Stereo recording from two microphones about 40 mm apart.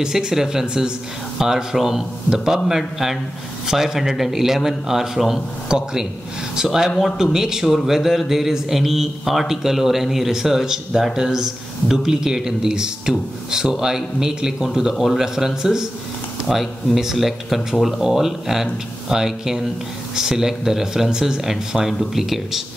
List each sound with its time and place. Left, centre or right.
0.0 s a man's voice: centre
5.7 s a man's voice: centre
16.4 s a man's voice: centre